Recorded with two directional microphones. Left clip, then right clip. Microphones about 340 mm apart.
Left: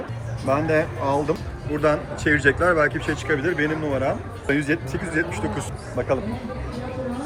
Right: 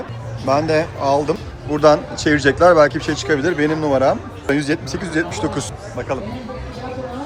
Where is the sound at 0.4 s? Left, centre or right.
Centre.